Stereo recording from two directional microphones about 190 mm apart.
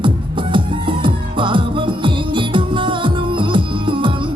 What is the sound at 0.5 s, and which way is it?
Music, 25° right (ahead or behind).